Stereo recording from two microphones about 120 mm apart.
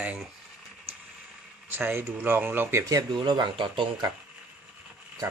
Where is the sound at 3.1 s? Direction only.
40° right (ahead or behind).